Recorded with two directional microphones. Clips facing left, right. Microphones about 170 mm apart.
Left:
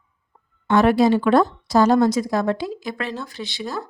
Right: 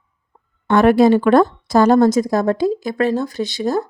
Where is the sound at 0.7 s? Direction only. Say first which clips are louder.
Right 4 dB; 55° right (ahead or behind).